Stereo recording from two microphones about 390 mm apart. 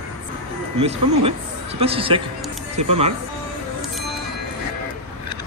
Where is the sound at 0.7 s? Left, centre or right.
Centre.